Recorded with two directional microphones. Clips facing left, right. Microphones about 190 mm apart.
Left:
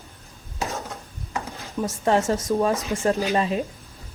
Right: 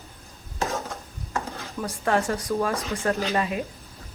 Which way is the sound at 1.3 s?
20° left (ahead or behind).